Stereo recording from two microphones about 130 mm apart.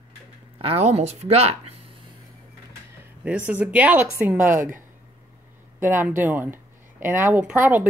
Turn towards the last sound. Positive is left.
turn(degrees=-15)  # may be behind; listen again after turning